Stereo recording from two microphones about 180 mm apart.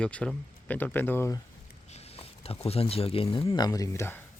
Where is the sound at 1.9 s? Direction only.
35° left (ahead or behind).